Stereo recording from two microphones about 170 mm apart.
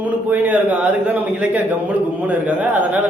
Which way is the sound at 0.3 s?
10° right (ahead or behind).